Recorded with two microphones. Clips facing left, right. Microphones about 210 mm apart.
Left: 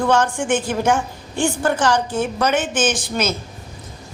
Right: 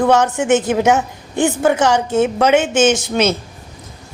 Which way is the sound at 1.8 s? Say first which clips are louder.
Right 5 dB; 20° right (ahead or behind).